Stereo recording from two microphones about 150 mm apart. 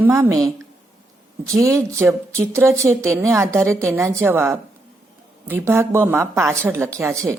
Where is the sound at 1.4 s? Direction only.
20° right (ahead or behind).